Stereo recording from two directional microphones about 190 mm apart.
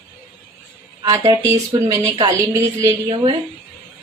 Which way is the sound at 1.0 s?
20° right (ahead or behind).